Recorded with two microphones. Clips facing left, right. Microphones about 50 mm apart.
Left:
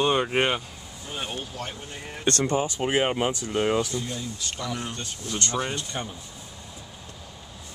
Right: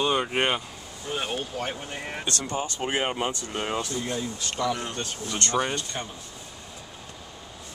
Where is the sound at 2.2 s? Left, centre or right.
Left.